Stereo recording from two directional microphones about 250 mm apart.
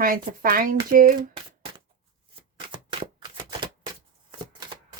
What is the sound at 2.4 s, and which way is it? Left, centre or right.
Typewriter, right.